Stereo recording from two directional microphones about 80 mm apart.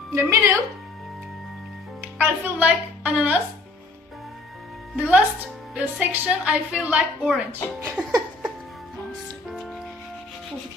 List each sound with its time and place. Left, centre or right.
0.1 s speech: right
2.0 s speech: right
4.9 s a woman's voice: centre